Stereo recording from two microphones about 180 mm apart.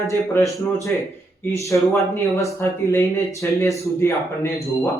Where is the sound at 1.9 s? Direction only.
15° left (ahead or behind).